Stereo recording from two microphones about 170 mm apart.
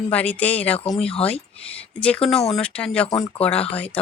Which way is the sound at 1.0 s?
35° left (ahead or behind).